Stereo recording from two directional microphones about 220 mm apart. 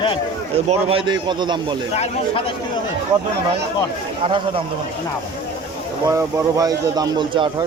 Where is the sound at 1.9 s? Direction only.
25° left (ahead or behind).